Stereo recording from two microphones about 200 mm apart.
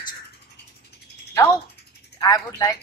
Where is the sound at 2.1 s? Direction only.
15° left (ahead or behind).